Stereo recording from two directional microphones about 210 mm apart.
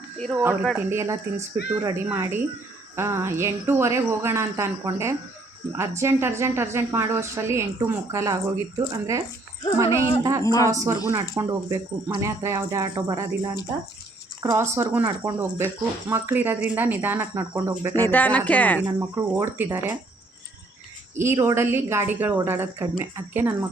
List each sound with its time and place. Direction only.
0.6 s speech: centre (ahead or behind)
0.9 s speech: 15° right (ahead or behind)
10.4 s speech: 15° left (ahead or behind)
10.7 s speech: 10° right (ahead or behind)
14.5 s speech: 10° right (ahead or behind)
18.1 s speech: 5° left (ahead or behind)
18.8 s speech: 10° right (ahead or behind)
21.2 s speech: 15° right (ahead or behind)